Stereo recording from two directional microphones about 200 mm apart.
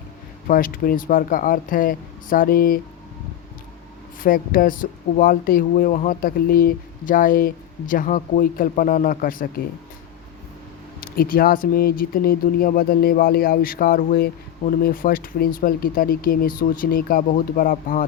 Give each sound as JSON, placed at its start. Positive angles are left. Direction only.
{"t": 0.4, "sound": "speech", "side_deg": 45}
{"t": 4.2, "sound": "speech", "side_deg": 45}
{"t": 11.2, "sound": "speech", "side_deg": 45}